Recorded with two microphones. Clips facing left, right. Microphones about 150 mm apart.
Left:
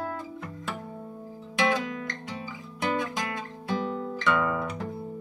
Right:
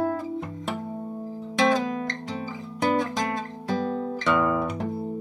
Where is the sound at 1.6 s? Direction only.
30° right (ahead or behind).